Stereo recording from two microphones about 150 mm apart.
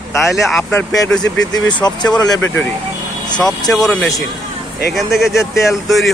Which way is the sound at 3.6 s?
5° left (ahead or behind).